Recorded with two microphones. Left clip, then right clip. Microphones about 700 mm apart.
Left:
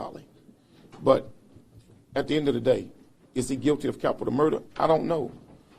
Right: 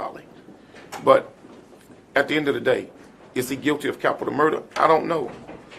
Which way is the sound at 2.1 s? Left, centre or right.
Left.